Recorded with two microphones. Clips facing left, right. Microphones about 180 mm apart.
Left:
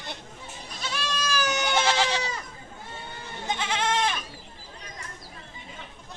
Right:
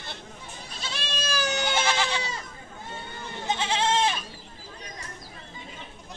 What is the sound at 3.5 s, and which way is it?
Goat, 25° right (ahead or behind).